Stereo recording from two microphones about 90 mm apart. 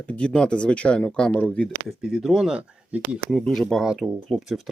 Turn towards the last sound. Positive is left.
turn(degrees=0)  # may be behind; listen again after turning